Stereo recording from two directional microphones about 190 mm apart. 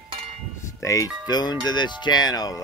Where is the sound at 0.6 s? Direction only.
15° left (ahead or behind).